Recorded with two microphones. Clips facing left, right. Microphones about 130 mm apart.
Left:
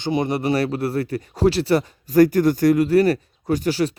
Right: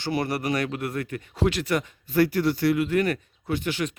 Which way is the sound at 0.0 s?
20° left (ahead or behind).